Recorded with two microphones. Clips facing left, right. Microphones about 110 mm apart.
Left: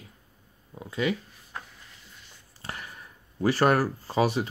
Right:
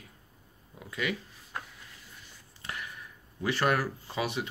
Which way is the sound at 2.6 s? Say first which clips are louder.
Left 1 dB; 35° left (ahead or behind).